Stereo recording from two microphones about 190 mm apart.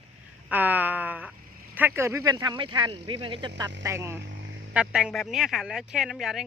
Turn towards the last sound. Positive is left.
turn(degrees=0)  # may be behind; listen again after turning